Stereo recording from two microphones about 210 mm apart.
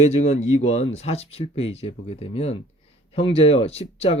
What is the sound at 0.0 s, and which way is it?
Speech, 30° left (ahead or behind).